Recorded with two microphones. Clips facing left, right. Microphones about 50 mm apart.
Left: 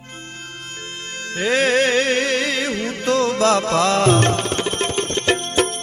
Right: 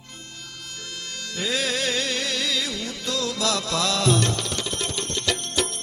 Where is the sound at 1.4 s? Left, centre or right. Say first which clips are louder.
Left 9 dB; left.